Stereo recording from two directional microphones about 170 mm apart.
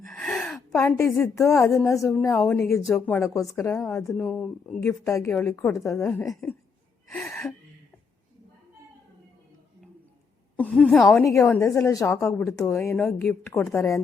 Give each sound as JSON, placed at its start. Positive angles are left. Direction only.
{"t": 0.1, "sound": "gasp", "side_deg": 0}
{"t": 0.9, "sound": "a woman's voice", "side_deg": 15}
{"t": 4.1, "sound": "speech", "side_deg": 0}
{"t": 4.8, "sound": "a woman's voice", "side_deg": 15}
{"t": 7.1, "sound": "gasp", "side_deg": 10}
{"t": 10.6, "sound": "speech", "side_deg": 5}
{"t": 11.2, "sound": "a woman's voice", "side_deg": 20}